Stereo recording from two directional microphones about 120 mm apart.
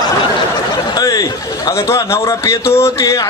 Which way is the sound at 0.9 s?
30° left (ahead or behind).